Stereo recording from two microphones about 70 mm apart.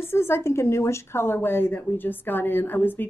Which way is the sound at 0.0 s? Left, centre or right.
Left.